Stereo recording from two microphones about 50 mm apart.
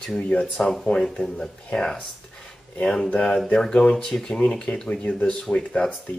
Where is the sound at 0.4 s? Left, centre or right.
Centre.